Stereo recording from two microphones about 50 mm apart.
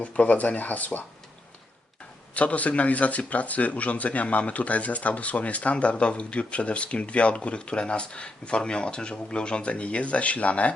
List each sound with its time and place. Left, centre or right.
0.0 s speech: left
2.3 s speech: left